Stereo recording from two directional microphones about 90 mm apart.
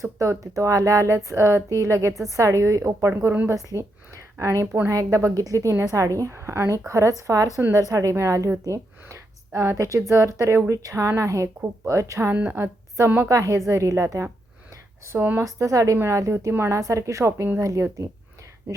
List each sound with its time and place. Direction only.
0.0 s speech: 35° right (ahead or behind)
4.9 s speech: 35° right (ahead or behind)
12.3 s speech: 15° right (ahead or behind)
13.2 s speech: 35° right (ahead or behind)
15.2 s speech: 20° right (ahead or behind)
15.4 s speech: 35° right (ahead or behind)